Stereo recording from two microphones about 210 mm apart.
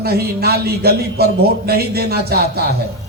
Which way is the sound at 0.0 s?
50° right (ahead or behind).